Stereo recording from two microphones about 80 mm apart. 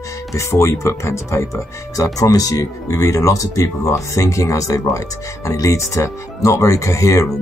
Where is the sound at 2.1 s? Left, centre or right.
Left.